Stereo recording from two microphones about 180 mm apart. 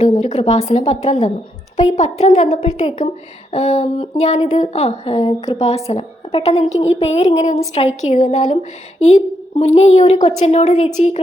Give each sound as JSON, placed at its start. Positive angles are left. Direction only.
{"t": 0.2, "sound": "a woman's voice", "side_deg": 40}